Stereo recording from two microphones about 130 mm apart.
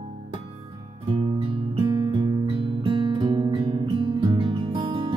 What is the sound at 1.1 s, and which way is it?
Music, 40° right (ahead or behind).